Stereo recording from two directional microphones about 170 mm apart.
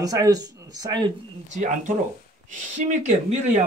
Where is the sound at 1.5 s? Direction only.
45° right (ahead or behind).